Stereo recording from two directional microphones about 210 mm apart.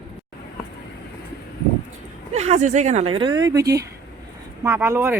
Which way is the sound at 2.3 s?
30° right (ahead or behind).